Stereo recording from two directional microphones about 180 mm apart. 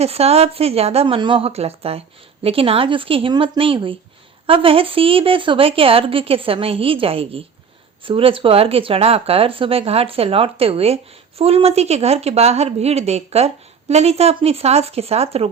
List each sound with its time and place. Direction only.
0.0 s a woman's voice: 35° right (ahead or behind)